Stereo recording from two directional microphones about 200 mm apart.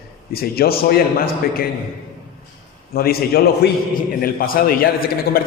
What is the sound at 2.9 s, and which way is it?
A man's voice, 50° left (ahead or behind).